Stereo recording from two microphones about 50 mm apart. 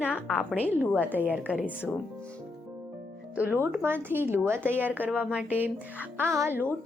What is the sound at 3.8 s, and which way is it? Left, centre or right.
Speech, right.